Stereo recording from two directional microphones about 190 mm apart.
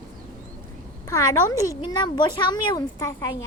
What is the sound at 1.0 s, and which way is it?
A woman's voice, 15° left (ahead or behind).